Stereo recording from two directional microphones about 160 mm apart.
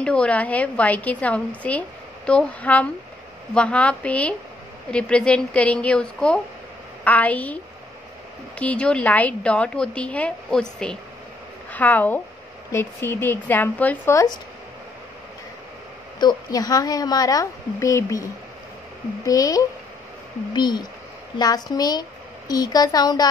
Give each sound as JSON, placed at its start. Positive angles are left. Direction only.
{"t": 0.0, "sound": "a woman's voice", "side_deg": 5}
{"t": 16.2, "sound": "speech", "side_deg": 25}